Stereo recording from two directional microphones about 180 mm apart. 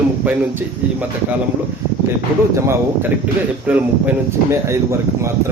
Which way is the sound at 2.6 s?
15° right (ahead or behind).